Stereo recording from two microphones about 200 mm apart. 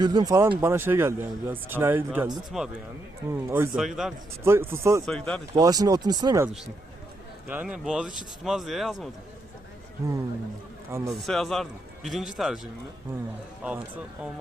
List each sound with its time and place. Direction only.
0.0 s a man's voice: 20° right (ahead or behind); by 2.7 s centre (ahead or behind)
3.2 s a man's voice: 10° right (ahead or behind)
3.8 s speech: centre (ahead or behind)
4.4 s a man's voice: 10° right (ahead or behind)
5.0 s speech: 5° left (ahead or behind)
5.5 s speech: 20° right (ahead or behind)
7.4 s speech: 5° right (ahead or behind)
11.0 s speech: centre (ahead or behind)
13.7 s a man's voice: 5° right (ahead or behind)